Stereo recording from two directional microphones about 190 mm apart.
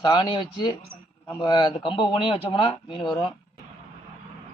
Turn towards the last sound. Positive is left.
turn(degrees=25)  # may be behind; listen again after turning